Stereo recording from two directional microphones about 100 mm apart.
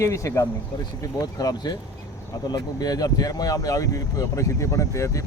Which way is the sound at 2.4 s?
40° left (ahead or behind).